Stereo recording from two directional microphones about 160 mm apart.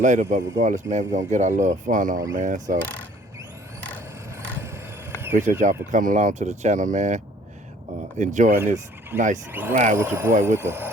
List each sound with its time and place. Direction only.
0.0 s speech: 50° right (ahead or behind)
4.4 s vehicle: 15° right (ahead or behind)
5.5 s speech: 55° right (ahead or behind)
8.2 s speech: 50° right (ahead or behind)
9.5 s speech: 15° right (ahead or behind)
9.7 s speech: 50° right (ahead or behind)
10.0 s speech: 15° right (ahead or behind)